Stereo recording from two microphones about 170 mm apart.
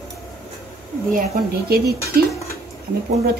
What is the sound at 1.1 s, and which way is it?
A woman's voice, 60° right (ahead or behind).